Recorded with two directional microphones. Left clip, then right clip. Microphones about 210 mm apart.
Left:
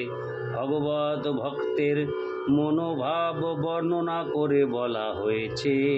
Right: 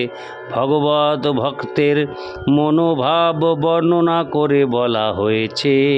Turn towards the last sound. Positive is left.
turn(degrees=-55)  # may be behind; listen again after turning